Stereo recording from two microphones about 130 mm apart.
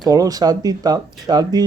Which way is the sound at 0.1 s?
30° right (ahead or behind).